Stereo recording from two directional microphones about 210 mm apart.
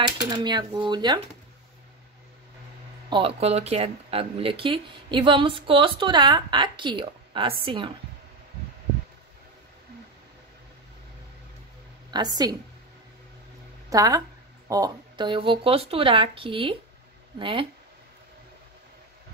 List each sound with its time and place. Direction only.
0.3 s speech: 20° right (ahead or behind)
3.1 s speech: 25° right (ahead or behind)
12.1 s a woman's voice: 20° right (ahead or behind)
13.8 s speech: 15° right (ahead or behind)